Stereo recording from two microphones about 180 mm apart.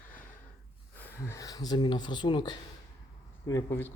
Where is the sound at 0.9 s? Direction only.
10° left (ahead or behind).